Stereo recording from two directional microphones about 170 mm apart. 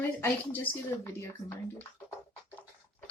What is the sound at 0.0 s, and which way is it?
A woman's voice, 10° left (ahead or behind).